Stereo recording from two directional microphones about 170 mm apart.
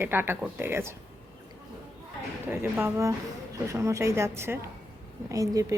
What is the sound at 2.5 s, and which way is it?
A woman's voice, 10° right (ahead or behind).